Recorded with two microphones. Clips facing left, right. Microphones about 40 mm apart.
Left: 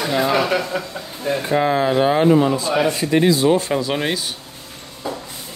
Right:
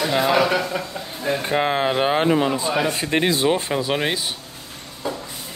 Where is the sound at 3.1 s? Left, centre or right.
Right.